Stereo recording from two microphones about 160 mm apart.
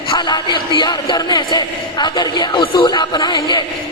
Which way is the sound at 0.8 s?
25° left (ahead or behind).